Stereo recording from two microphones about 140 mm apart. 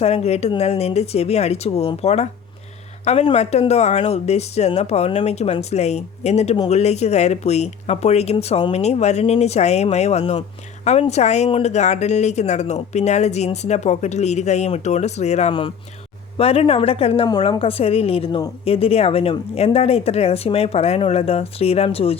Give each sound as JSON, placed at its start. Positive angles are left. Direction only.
{"t": 0.0, "sound": "speech", "side_deg": 50}
{"t": 17.2, "sound": "speech", "side_deg": 30}